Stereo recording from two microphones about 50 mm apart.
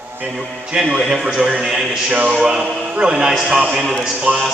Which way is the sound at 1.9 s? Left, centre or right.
Right.